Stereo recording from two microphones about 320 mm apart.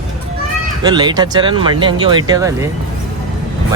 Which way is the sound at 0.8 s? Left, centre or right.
Centre.